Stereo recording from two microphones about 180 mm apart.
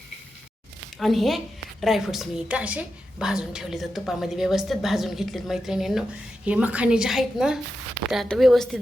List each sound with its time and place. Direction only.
0.9 s a woman's voice: centre (ahead or behind)